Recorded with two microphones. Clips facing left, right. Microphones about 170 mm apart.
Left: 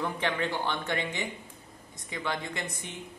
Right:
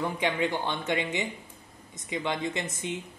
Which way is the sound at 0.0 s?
15° right (ahead or behind).